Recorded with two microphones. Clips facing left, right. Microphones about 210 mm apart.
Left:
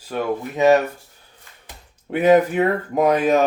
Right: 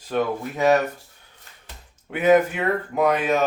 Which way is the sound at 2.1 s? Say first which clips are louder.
Left 3 dB; 35° left (ahead or behind).